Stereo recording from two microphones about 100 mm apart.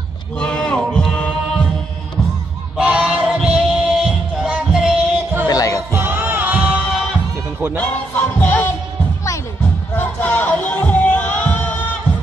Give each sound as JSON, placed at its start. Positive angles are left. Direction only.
{"t": 0.4, "sound": "heart sounds", "side_deg": 10}
{"t": 2.8, "sound": "music", "side_deg": -10}
{"t": 5.5, "sound": "music", "side_deg": 35}
{"t": 5.9, "sound": "music", "side_deg": -20}
{"t": 7.7, "sound": "music", "side_deg": 15}
{"t": 9.9, "sound": "music", "side_deg": 15}